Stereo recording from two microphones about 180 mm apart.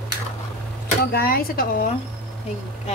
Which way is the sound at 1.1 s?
55° left (ahead or behind).